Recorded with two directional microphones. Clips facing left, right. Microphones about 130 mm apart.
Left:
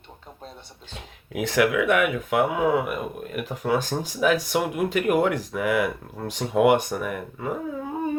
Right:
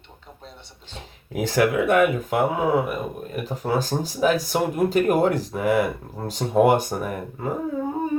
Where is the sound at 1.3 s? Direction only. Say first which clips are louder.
Right 1 dB; 35° right (ahead or behind).